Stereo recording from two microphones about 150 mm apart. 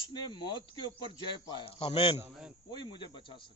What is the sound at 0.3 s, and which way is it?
Speech, 30° left (ahead or behind).